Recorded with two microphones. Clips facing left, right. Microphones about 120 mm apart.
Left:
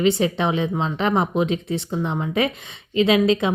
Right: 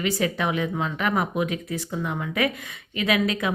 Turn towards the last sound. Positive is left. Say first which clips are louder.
# left 6 dB
turn(degrees=25)  # may be behind; listen again after turning